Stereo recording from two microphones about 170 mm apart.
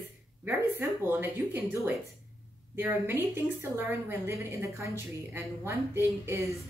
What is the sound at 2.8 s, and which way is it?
Speech, 15° right (ahead or behind).